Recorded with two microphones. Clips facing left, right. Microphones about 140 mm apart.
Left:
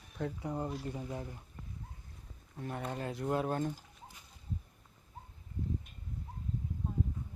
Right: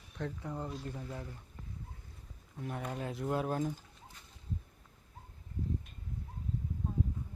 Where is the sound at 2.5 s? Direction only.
Centre (ahead or behind).